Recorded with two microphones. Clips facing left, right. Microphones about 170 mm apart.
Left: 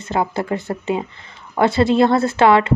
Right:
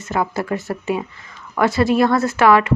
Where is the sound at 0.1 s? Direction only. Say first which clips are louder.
Left 1 dB; 25° left (ahead or behind).